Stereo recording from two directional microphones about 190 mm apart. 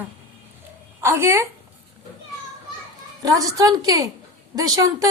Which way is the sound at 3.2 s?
20° right (ahead or behind).